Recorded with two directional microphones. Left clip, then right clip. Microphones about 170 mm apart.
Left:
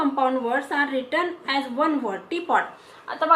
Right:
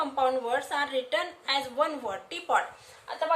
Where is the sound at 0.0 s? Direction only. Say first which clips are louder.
Left 4 dB; 25° right (ahead or behind).